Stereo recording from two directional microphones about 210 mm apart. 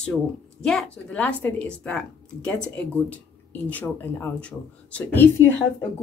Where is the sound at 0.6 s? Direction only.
5° left (ahead or behind).